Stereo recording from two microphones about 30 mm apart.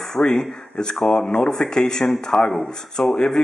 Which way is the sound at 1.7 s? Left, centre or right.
Left.